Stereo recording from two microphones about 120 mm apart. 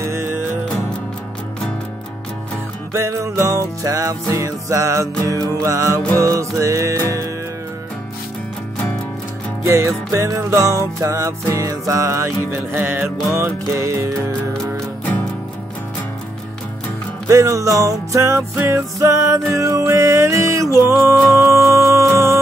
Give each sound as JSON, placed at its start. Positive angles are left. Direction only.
{"t": 2.9, "sound": "music", "side_deg": -25}
{"t": 9.7, "sound": "music", "side_deg": -25}
{"t": 17.3, "sound": "music", "side_deg": -25}